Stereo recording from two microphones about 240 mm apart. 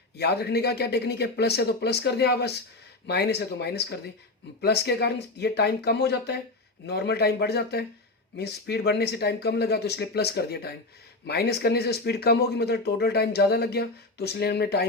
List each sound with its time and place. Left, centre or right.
0.2 s speech: left